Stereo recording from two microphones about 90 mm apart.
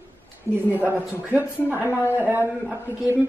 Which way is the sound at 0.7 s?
20° right (ahead or behind).